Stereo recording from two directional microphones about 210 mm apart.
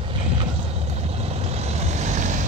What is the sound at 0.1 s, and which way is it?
Vehicle, 25° right (ahead or behind).